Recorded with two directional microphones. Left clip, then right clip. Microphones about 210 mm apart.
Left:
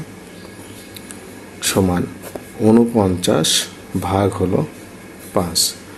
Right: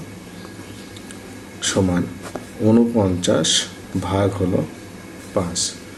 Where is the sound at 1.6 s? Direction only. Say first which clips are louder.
Left 2 dB; 25° left (ahead or behind).